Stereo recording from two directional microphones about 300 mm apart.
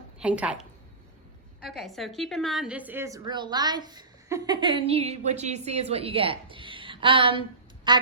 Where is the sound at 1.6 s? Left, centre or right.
Centre.